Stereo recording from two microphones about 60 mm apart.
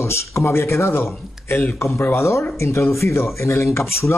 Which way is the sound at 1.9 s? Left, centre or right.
Left.